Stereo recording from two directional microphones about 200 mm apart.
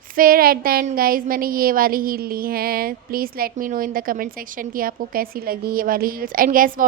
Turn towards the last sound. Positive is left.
turn(degrees=-45)  # may be behind; listen again after turning